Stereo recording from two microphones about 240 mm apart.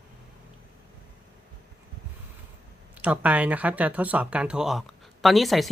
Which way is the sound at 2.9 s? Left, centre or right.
Centre.